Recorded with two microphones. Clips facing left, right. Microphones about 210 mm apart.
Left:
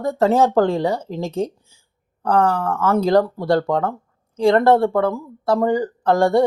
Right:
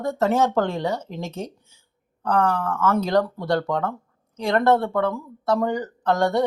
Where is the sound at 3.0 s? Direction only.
30° left (ahead or behind).